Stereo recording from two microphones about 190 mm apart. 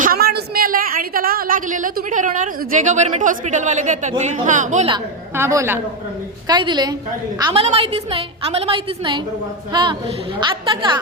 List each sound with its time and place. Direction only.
0.0 s a woman's voice: 50° right (ahead or behind)
5.4 s a woman's voice: 15° right (ahead or behind)